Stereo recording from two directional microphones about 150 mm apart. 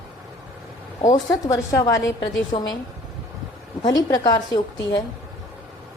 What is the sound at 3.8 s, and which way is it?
Speech, 25° left (ahead or behind).